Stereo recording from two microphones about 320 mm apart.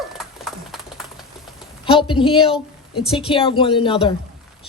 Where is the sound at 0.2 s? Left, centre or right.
Centre.